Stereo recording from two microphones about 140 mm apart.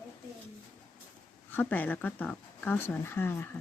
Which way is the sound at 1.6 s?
10° left (ahead or behind).